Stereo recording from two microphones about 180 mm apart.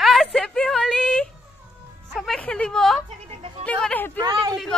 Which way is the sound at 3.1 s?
35° right (ahead or behind).